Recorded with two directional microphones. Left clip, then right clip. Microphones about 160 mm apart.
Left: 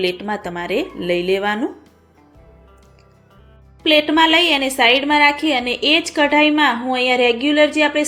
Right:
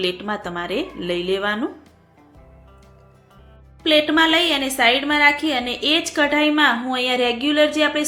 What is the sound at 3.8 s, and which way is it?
A woman's voice, 15° left (ahead or behind).